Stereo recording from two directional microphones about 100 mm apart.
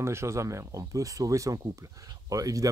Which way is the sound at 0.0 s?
25° right (ahead or behind).